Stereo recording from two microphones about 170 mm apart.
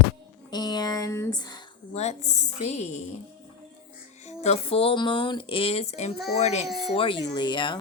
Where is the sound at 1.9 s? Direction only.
40° left (ahead or behind).